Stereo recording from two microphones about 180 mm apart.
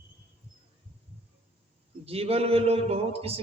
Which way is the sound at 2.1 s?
35° right (ahead or behind).